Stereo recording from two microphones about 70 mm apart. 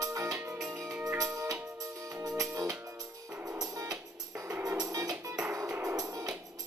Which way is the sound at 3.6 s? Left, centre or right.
Right.